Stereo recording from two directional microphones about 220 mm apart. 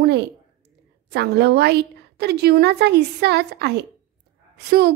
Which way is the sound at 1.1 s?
50° right (ahead or behind).